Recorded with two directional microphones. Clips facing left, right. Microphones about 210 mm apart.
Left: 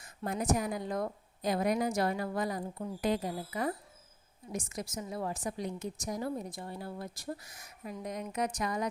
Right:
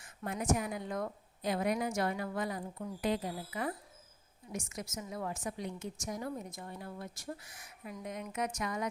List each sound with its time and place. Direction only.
0.0 s a woman's voice: 35° left (ahead or behind)